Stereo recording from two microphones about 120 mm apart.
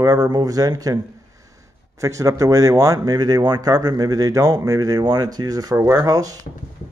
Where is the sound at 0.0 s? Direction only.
30° right (ahead or behind).